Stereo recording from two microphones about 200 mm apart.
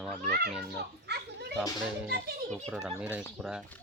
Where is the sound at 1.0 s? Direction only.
55° right (ahead or behind).